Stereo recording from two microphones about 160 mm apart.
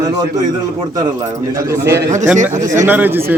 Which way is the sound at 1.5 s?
15° right (ahead or behind).